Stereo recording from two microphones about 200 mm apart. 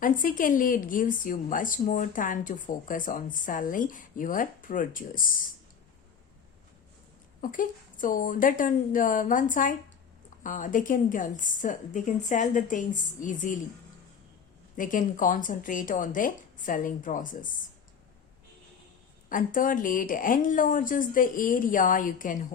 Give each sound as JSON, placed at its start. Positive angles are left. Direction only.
{"t": 0.0, "sound": "a woman's voice", "side_deg": 40}
{"t": 7.4, "sound": "a woman's voice", "side_deg": 40}
{"t": 14.8, "sound": "a woman's voice", "side_deg": 40}
{"t": 19.3, "sound": "a woman's voice", "side_deg": 40}